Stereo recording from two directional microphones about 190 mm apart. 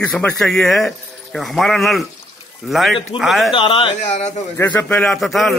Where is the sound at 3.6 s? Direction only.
25° left (ahead or behind).